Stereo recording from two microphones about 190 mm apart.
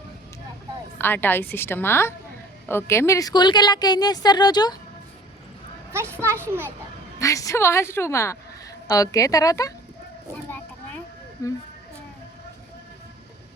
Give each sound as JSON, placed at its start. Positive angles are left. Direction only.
{"t": 0.9, "sound": "a woman's voice", "side_deg": 10}
{"t": 5.9, "sound": "a child's voice", "side_deg": -15}
{"t": 7.2, "sound": "a woman's voice", "side_deg": 15}
{"t": 10.3, "sound": "a sound", "side_deg": 10}
{"t": 11.4, "sound": "a woman's voice", "side_deg": 15}